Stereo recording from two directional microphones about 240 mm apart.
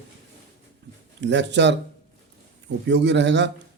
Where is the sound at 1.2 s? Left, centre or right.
Right.